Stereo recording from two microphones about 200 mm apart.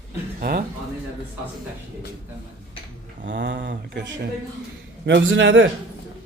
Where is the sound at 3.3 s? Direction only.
60° right (ahead or behind).